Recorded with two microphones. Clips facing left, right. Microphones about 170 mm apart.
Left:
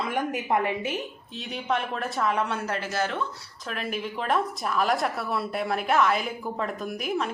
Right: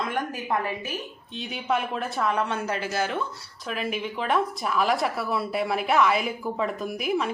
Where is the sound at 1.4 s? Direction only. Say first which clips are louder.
Right 1 dB; centre (ahead or behind).